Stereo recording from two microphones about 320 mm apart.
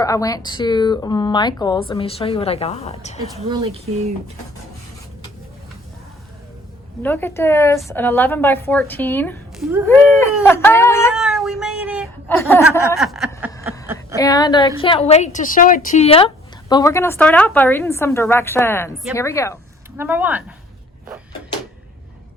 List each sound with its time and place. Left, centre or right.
0.0 s a woman's voice: centre
3.4 s speech: centre
7.0 s speech: centre
11.1 s cat: centre
12.3 s speech: centre
13.0 s a sound: centre
14.2 s speech: centre
20.0 s a sound: centre